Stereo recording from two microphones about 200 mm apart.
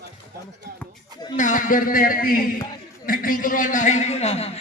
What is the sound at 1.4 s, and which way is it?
A man's voice, 40° left (ahead or behind).